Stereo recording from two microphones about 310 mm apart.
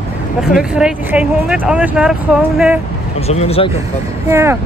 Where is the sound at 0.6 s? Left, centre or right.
Centre.